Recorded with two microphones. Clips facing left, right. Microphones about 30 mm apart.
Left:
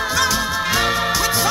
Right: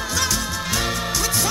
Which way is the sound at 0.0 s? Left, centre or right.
Left.